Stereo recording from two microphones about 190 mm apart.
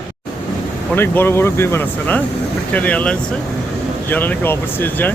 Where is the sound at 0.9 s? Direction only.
10° left (ahead or behind).